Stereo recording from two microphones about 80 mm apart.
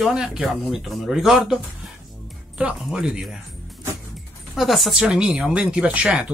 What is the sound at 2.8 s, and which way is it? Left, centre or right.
Speech, centre.